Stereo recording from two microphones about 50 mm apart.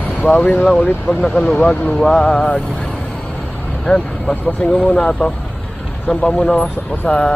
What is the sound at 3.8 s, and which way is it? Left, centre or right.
Speech, centre.